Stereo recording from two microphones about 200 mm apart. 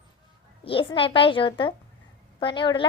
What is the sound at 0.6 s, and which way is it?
A woman's voice, 25° left (ahead or behind).